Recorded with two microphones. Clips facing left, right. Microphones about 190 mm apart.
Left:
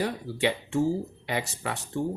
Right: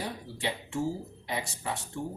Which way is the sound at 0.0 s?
75° left (ahead or behind).